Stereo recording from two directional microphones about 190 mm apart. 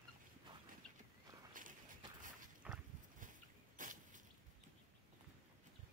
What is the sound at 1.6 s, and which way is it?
Walk, 45° right (ahead or behind).